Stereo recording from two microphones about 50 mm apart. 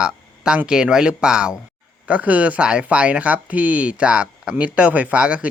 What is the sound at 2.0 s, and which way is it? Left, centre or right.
Speech, right.